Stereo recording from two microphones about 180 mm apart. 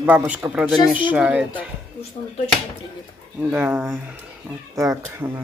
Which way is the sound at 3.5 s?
10° right (ahead or behind).